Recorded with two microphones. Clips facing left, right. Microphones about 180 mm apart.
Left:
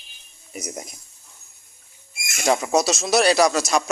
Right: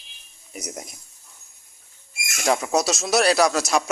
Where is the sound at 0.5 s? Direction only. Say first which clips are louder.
Left 2 dB; centre (ahead or behind).